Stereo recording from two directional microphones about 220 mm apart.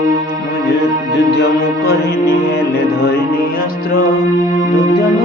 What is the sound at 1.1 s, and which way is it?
Music, 50° left (ahead or behind).